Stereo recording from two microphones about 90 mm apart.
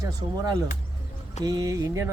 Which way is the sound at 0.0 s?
40° right (ahead or behind).